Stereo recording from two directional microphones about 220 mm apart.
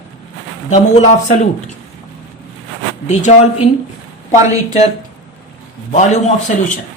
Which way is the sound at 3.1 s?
30° left (ahead or behind).